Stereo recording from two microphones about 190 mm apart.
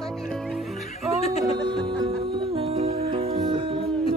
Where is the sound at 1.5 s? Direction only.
25° right (ahead or behind).